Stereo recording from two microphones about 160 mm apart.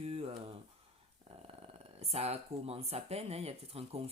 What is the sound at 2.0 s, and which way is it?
Speech, 40° right (ahead or behind).